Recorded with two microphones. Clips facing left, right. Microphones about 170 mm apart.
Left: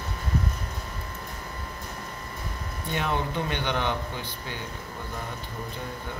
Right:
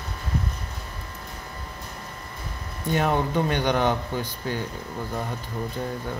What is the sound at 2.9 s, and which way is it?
Speech, 45° right (ahead or behind).